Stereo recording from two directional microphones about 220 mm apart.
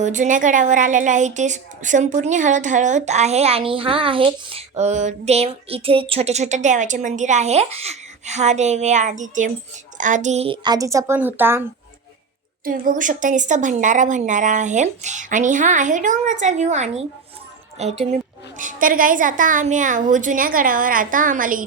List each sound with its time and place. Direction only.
0.0 s a woman's voice: 35° right (ahead or behind); by 11.6 s 10° right (ahead or behind)
12.6 s a woman's voice: 40° right (ahead or behind)